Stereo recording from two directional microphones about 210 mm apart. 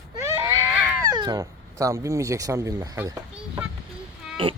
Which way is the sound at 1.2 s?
20° right (ahead or behind).